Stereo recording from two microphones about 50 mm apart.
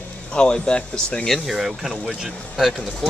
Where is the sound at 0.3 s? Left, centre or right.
Centre.